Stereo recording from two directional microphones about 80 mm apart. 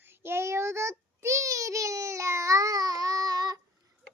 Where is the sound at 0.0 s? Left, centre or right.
Right.